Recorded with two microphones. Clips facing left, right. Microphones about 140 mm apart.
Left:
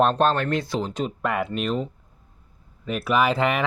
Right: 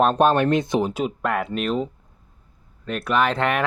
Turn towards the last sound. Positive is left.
turn(degrees=5)  # may be behind; listen again after turning